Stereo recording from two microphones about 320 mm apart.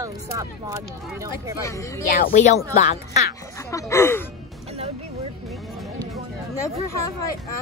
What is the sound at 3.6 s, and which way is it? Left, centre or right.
Speech, centre.